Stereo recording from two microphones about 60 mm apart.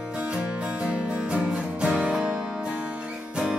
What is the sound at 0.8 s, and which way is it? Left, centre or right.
Music, centre.